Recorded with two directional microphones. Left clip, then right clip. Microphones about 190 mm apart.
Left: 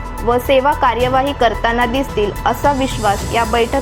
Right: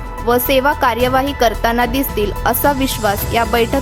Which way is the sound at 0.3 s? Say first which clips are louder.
Left 1 dB; 30° right (ahead or behind).